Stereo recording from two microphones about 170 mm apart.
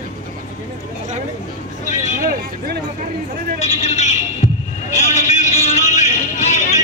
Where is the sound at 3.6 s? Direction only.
40° left (ahead or behind).